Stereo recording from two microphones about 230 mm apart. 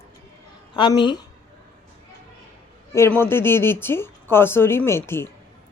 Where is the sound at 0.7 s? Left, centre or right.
Centre.